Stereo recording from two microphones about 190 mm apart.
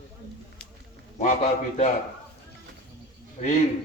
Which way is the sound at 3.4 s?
40° left (ahead or behind).